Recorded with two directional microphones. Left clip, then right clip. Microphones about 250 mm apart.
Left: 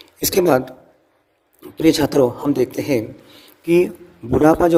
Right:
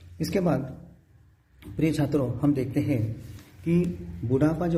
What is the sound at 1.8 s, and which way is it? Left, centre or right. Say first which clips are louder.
Speech: left 11 dB; left.